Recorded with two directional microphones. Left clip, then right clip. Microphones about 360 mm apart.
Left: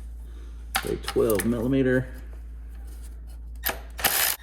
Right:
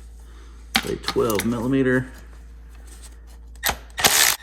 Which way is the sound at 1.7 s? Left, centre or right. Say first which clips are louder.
Right 3 dB; centre.